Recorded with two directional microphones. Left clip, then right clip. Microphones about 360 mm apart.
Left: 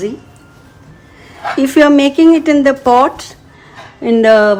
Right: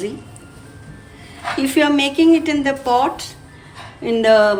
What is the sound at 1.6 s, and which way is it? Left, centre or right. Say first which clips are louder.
Speech: left 8 dB; left.